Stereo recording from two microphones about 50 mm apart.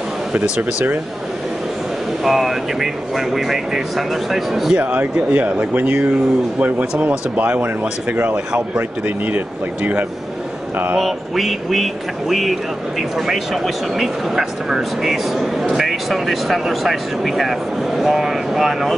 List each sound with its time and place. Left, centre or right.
0.3 s speech: right
2.2 s speech: centre
4.7 s speech: right
6.6 s speech: right
11.0 s speech: centre